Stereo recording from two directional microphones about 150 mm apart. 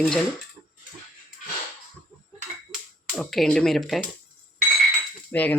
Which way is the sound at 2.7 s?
Centre (ahead or behind).